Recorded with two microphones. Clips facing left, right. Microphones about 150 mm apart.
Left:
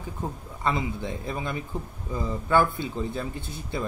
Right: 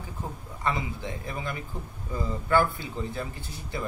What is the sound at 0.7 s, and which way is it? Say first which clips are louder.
Speech: left 3 dB; 25° left (ahead or behind).